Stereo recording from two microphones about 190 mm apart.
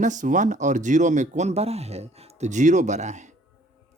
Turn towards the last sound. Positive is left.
turn(degrees=-40)  # may be behind; listen again after turning